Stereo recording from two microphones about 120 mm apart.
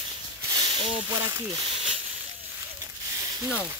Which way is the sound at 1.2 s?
25° right (ahead or behind).